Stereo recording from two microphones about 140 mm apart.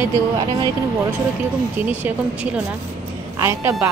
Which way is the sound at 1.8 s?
10° right (ahead or behind).